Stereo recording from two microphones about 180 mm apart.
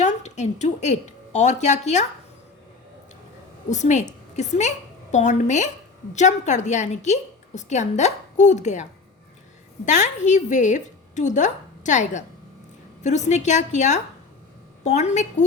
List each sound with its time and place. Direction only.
0.0 s a woman's voice: 40° left (ahead or behind)
3.7 s a woman's voice: 40° left (ahead or behind)